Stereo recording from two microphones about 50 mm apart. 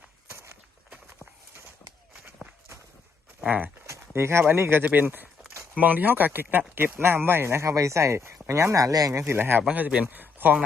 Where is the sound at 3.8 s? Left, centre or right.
Right.